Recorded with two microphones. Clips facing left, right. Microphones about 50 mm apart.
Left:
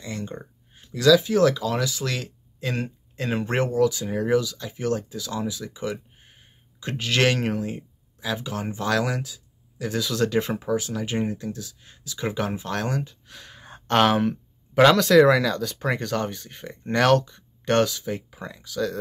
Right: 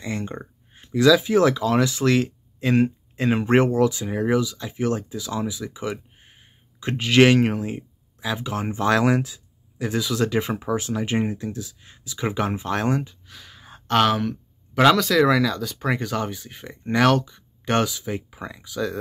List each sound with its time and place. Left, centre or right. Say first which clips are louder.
0.0 s speech: right 4 dB; right
3.5 s speech: right 3 dB; right
4.0 s speech: right 1 dB; centre
10.8 s speech: right 3 dB; right
13.3 s a sound: left 1 dB; centre
14.8 s speech: left 2 dB; centre